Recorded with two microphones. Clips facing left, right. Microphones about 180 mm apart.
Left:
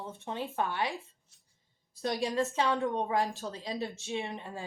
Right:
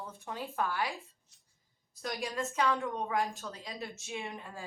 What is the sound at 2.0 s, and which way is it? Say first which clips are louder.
Speech: left 6 dB; 30° left (ahead or behind).